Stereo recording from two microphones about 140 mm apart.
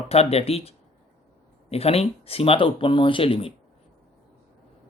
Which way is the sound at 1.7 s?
45° left (ahead or behind).